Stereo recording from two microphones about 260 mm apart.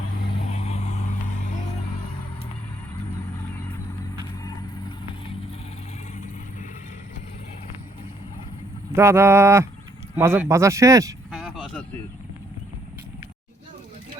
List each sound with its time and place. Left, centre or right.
0.5 s vehicle: left
9.0 s speech: centre
11.3 s a sound: centre